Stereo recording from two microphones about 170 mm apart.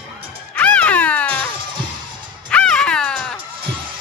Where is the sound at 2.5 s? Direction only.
5° left (ahead or behind).